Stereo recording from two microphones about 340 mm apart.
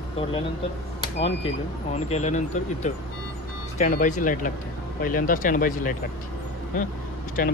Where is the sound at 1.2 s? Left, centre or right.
Centre.